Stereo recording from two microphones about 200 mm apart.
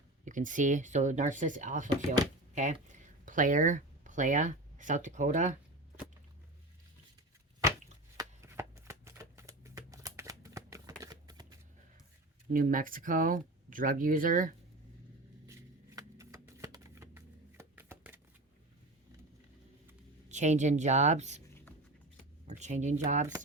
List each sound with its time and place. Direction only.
0.3 s speech: 40° right (ahead or behind)
8.1 s shuffling cards: 15° right (ahead or behind)
12.5 s speech: 45° right (ahead or behind)
16.0 s shuffling cards: 15° right (ahead or behind)
20.2 s speech: 35° right (ahead or behind)
22.4 s speech: 35° right (ahead or behind)